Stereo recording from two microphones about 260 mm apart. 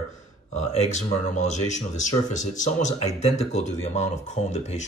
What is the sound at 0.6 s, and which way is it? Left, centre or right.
A man's voice, left.